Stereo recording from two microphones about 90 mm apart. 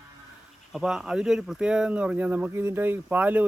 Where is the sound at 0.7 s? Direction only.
5° right (ahead or behind).